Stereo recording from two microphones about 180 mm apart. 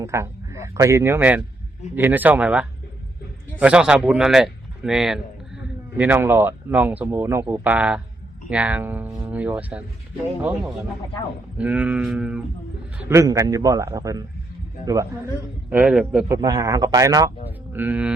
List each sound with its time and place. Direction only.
0.0 s a man's voice: 15° right (ahead or behind)
11.5 s a man's voice: 5° right (ahead or behind)
13.0 s speech: 15° right (ahead or behind)
15.7 s a man's voice: 5° right (ahead or behind)
16.3 s a man's voice: 20° right (ahead or behind)